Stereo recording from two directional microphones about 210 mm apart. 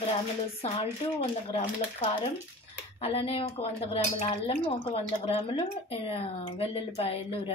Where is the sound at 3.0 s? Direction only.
30° left (ahead or behind).